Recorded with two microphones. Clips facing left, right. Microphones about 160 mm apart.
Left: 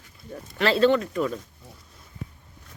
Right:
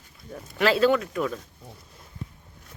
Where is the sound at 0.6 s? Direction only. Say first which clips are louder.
Left 1 dB; 5° right (ahead or behind).